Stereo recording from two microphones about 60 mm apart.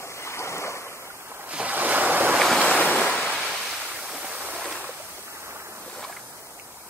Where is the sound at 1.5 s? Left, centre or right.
Right.